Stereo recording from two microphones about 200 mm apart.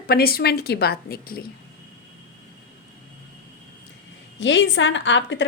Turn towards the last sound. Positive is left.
turn(degrees=65)  # may be behind; listen again after turning